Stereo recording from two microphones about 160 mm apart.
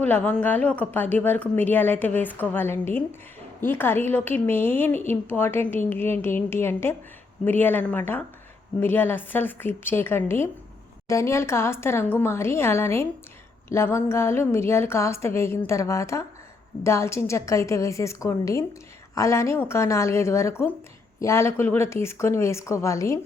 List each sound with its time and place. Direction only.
0.0 s a woman's voice: 10° left (ahead or behind)